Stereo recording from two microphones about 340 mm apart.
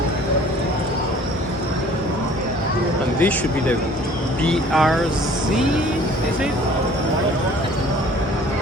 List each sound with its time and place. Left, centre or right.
3.2 s speech: centre